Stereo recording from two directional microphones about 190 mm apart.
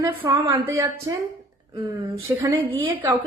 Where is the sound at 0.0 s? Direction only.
15° right (ahead or behind).